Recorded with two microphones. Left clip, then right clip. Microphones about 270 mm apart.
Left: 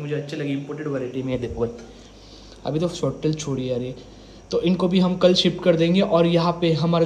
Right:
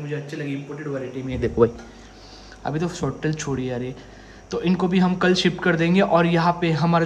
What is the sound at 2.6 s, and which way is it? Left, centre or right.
Speech, centre.